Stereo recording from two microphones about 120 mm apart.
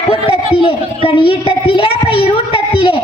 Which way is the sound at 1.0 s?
50° left (ahead or behind).